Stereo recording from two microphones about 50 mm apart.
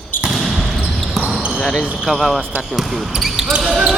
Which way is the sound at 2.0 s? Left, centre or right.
Centre.